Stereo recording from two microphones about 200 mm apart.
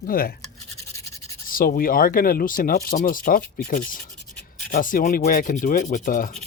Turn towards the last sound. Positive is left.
turn(degrees=45)  # may be behind; listen again after turning